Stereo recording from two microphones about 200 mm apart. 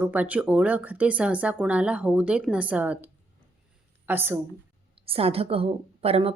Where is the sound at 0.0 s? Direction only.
10° right (ahead or behind).